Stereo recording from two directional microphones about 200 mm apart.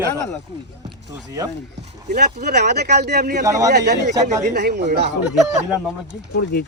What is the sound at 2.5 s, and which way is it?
Speech, 55° right (ahead or behind).